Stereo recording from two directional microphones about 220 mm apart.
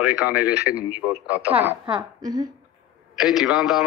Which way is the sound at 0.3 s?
5° right (ahead or behind).